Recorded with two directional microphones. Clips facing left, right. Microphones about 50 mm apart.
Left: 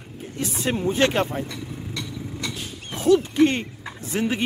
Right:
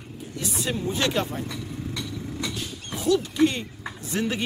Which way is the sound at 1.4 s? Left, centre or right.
Centre.